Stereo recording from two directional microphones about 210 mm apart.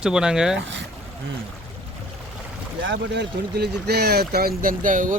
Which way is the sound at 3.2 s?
50° right (ahead or behind).